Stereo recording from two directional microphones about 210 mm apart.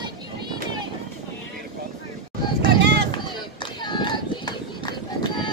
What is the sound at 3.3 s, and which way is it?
Run, 20° left (ahead or behind).